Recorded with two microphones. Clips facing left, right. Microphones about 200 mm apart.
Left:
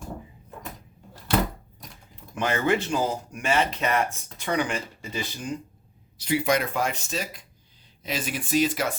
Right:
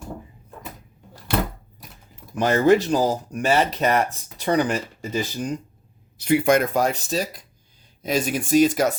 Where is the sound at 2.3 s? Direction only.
40° right (ahead or behind).